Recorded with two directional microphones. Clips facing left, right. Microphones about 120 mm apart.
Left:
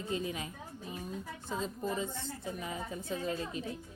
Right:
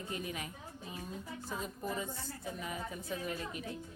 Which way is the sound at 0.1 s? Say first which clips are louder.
Left 5 dB; 25° left (ahead or behind).